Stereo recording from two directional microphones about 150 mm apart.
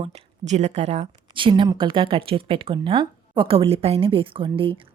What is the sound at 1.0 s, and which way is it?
A woman's voice, 35° right (ahead or behind).